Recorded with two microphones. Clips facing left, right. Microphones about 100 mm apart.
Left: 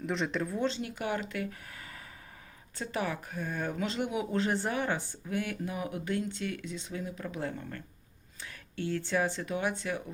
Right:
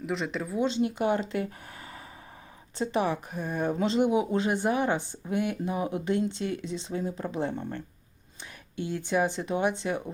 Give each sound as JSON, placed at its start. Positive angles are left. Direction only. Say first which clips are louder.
{"t": 0.0, "sound": "speech", "louder": "right 1 dB", "side_deg": 0}
{"t": 0.7, "sound": "speech", "louder": "right 8 dB", "side_deg": -25}
{"t": 8.7, "sound": "speech", "louder": "right 3 dB", "side_deg": -15}